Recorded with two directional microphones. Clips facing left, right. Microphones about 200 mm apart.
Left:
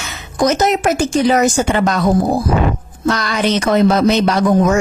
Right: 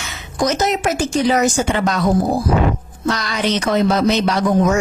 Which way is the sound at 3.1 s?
55° left (ahead or behind).